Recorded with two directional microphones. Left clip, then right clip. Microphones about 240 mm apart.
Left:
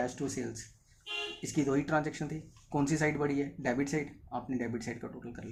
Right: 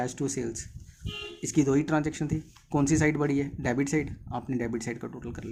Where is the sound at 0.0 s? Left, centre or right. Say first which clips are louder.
Right 4 dB; right.